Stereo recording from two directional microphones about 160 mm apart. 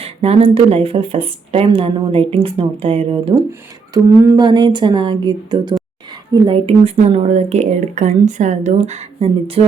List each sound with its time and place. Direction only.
0.0 s speech: 40° right (ahead or behind)
3.9 s speech: 20° right (ahead or behind); by 9.6 s 40° right (ahead or behind)